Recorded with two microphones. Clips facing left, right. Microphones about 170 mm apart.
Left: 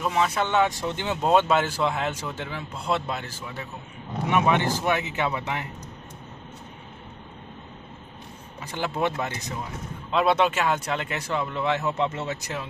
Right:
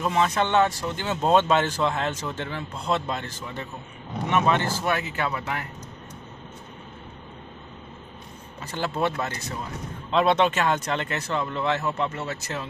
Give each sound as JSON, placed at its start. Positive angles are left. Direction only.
{"t": 0.0, "sound": "speech", "side_deg": 5}
{"t": 0.7, "sound": "speech", "side_deg": 20}
{"t": 8.5, "sound": "speech", "side_deg": 15}